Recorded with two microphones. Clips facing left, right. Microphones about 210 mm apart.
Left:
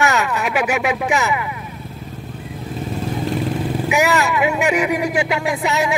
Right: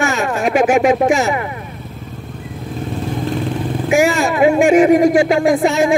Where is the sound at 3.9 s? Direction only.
40° right (ahead or behind).